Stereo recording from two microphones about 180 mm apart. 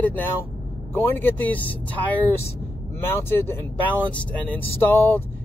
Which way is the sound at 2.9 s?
10° left (ahead or behind).